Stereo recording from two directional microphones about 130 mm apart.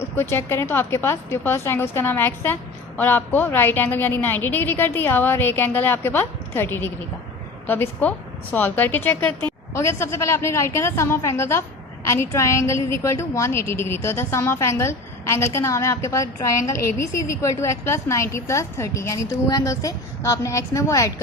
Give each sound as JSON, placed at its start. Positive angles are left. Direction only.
{"t": 0.0, "sound": "a woman's voice", "side_deg": 20}